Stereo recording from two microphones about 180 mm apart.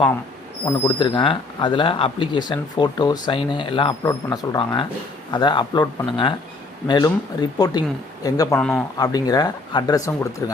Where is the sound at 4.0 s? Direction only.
15° left (ahead or behind).